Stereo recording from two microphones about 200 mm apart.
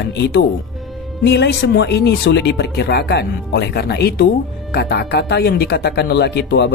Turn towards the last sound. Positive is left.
turn(degrees=55)  # may be behind; listen again after turning